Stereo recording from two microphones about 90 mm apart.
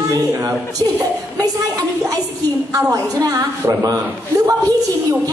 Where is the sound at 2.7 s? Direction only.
40° right (ahead or behind).